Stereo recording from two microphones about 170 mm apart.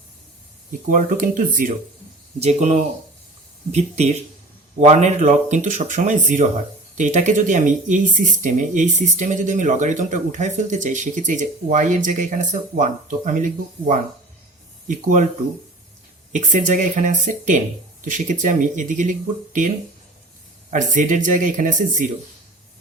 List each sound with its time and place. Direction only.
0.9 s speech: 50° right (ahead or behind)
2.4 s speech: 40° right (ahead or behind)
16.3 s speech: 50° right (ahead or behind)
20.7 s speech: 50° right (ahead or behind)